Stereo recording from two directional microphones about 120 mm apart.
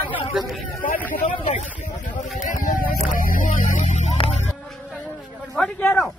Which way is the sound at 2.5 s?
90° left.